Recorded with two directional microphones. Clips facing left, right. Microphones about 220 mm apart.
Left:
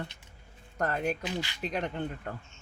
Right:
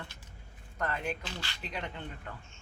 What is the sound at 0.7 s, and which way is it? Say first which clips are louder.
Speech: left 5 dB; 45° left (ahead or behind).